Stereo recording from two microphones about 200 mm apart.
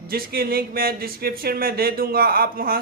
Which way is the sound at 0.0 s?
50° right (ahead or behind).